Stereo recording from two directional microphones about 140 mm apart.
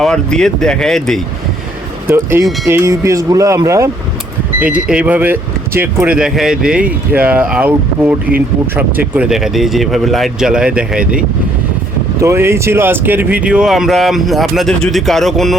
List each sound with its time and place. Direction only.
0.0 s speech: 5° left (ahead or behind)
2.0 s speech: 20° right (ahead or behind)
4.6 s speech: 10° right (ahead or behind)
12.2 s speech: 20° right (ahead or behind); by 15.5 s centre (ahead or behind)